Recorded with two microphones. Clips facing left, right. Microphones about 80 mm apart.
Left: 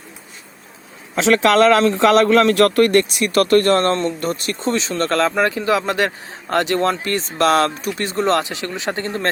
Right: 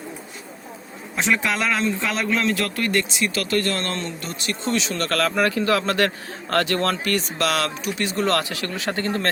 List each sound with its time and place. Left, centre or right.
1.1 s speech: left
8.2 s speech: left